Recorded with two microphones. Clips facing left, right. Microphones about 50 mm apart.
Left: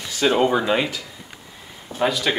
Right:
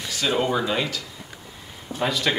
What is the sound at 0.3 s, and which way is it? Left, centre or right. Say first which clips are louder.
Speech: left 4 dB; centre.